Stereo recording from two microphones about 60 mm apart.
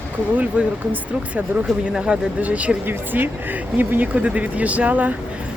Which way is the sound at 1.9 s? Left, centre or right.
Centre.